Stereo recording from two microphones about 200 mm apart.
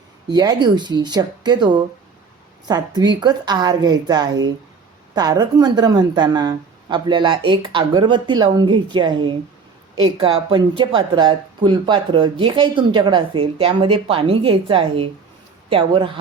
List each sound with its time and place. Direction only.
0.3 s speech: 20° right (ahead or behind)